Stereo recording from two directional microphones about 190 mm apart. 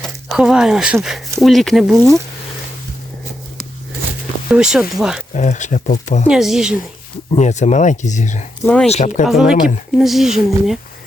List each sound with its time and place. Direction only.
0.3 s speech: 5° right (ahead or behind)
4.5 s speech: 5° right (ahead or behind)
5.3 s speech: 40° left (ahead or behind)
6.2 s speech: 5° right (ahead or behind)
7.3 s speech: 40° left (ahead or behind)
8.6 s speech: centre (ahead or behind)
8.9 s speech: 40° left (ahead or behind)
9.2 s speech: centre (ahead or behind)